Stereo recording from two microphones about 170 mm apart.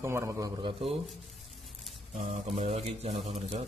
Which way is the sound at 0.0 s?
15° right (ahead or behind).